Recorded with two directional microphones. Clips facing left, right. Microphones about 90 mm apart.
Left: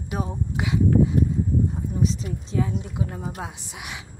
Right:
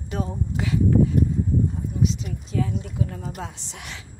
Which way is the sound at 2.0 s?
35° left (ahead or behind).